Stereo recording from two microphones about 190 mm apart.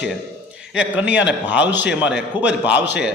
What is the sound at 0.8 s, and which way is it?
A man's voice, 10° right (ahead or behind).